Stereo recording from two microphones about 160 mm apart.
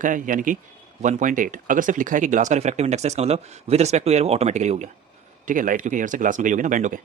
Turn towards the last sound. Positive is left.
turn(degrees=-55)  # may be behind; listen again after turning